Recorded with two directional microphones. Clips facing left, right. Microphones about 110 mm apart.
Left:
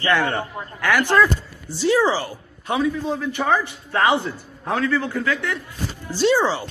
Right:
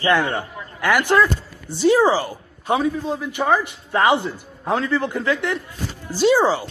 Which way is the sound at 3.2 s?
15° right (ahead or behind).